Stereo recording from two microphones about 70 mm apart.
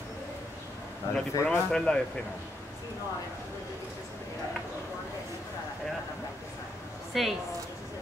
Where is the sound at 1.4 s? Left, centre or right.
Centre.